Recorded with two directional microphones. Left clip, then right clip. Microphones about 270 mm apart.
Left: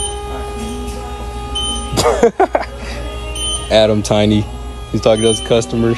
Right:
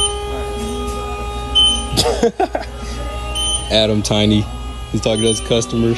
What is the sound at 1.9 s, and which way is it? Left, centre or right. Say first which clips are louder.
Music: left 4 dB; centre.